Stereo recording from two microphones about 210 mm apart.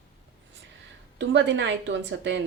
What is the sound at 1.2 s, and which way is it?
Speech, 60° right (ahead or behind).